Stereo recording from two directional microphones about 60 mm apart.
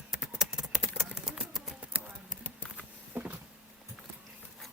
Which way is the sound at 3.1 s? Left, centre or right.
Right.